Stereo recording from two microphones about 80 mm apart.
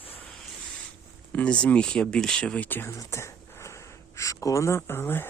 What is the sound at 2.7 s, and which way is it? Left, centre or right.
Speech, left.